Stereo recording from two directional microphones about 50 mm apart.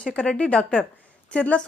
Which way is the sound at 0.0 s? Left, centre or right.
Centre.